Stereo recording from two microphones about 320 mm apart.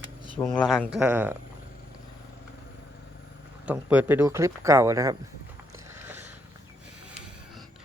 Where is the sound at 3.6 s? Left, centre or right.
Centre.